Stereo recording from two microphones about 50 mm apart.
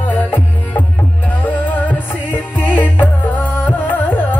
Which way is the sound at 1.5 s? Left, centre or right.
Left.